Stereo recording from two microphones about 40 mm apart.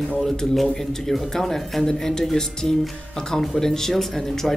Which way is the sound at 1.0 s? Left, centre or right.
Centre.